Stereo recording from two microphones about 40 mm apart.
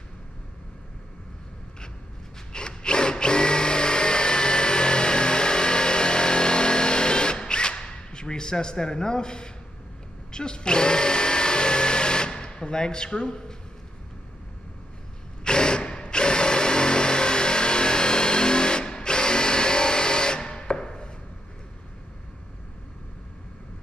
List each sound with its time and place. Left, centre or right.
2.5 s tools: left
10.3 s blender: left
15.4 s drill: left